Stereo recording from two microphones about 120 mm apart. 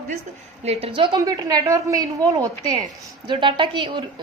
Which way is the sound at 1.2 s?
30° right (ahead or behind).